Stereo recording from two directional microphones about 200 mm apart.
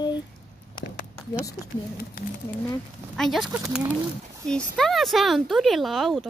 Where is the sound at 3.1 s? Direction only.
Centre (ahead or behind).